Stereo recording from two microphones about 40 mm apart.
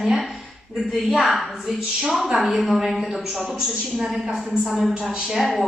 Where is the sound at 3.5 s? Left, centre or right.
Centre.